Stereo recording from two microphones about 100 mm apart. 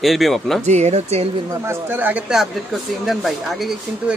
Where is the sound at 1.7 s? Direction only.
20° right (ahead or behind).